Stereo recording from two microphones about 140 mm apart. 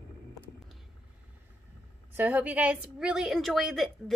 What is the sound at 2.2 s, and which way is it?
A woman's voice, 15° right (ahead or behind).